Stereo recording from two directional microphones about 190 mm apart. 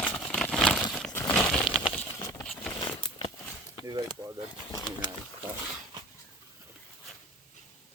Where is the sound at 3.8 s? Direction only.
20° right (ahead or behind).